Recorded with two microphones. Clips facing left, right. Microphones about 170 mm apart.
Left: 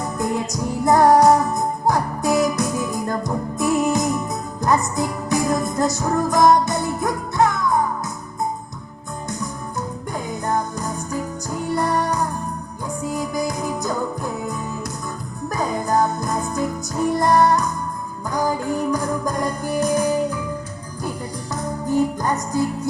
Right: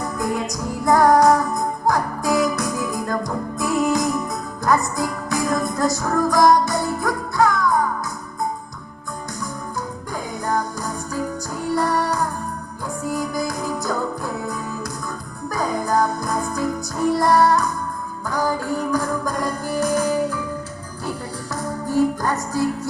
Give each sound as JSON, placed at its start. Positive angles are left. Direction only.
{"t": 0.2, "sound": "music", "side_deg": 25}
{"t": 10.4, "sound": "music", "side_deg": 20}
{"t": 21.5, "sound": "music", "side_deg": 20}